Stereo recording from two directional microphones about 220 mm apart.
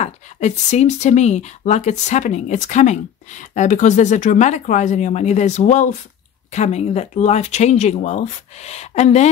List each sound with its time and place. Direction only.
0.0 s speech: 30° left (ahead or behind)